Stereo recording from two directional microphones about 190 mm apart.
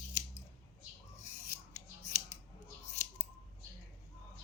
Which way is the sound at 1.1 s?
40° left (ahead or behind).